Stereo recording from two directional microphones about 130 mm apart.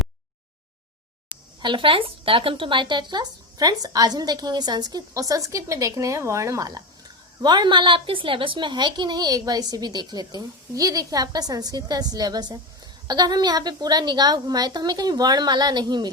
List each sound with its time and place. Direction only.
1.6 s speech: 40° right (ahead or behind)